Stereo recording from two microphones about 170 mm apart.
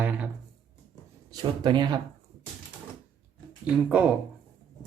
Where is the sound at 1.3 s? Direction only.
25° right (ahead or behind).